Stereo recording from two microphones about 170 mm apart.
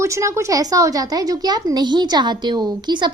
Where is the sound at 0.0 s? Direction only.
15° right (ahead or behind).